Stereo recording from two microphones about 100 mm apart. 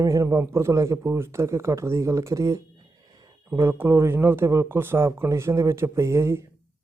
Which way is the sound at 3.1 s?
40° right (ahead or behind).